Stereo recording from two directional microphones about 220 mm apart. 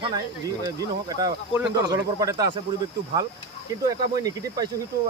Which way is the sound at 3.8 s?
15° right (ahead or behind).